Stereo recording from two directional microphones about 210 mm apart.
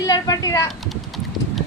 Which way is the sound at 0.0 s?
15° left (ahead or behind).